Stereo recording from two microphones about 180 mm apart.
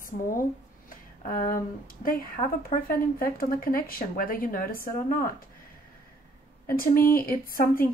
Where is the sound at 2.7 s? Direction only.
50° left (ahead or behind).